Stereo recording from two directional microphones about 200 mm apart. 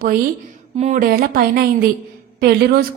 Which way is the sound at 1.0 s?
45° right (ahead or behind).